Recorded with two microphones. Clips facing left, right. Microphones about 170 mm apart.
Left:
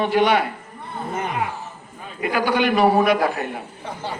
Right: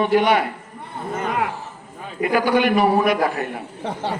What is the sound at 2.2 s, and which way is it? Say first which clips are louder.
A man's voice: right 3 dB; 45° right (ahead or behind).